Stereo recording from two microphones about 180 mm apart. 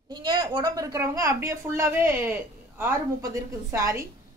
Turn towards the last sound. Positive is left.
turn(degrees=-15)  # may be behind; listen again after turning